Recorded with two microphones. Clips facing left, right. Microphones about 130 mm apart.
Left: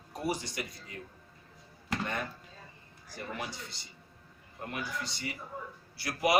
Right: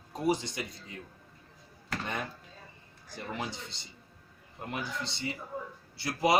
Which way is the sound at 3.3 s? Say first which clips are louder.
Right 2 dB; 25° right (ahead or behind).